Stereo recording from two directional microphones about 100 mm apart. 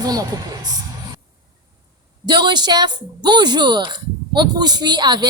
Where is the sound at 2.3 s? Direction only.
45° right (ahead or behind).